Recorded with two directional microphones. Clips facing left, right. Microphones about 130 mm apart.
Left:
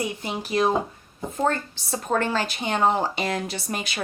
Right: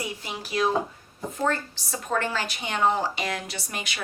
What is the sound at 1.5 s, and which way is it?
Speech, 30° left (ahead or behind).